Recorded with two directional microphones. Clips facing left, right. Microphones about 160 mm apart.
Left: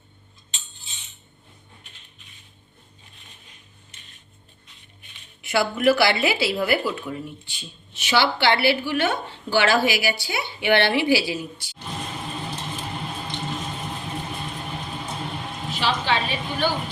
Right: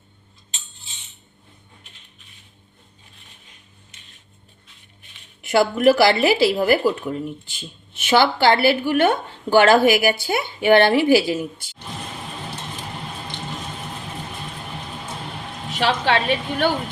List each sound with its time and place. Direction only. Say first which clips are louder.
5.5 s a woman's voice: right 4 dB; 45° right (ahead or behind)
15.7 s a woman's voice: right 4 dB; 65° right (ahead or behind)